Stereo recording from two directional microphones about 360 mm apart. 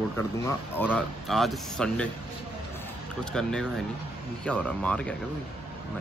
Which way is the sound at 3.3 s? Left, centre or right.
Centre.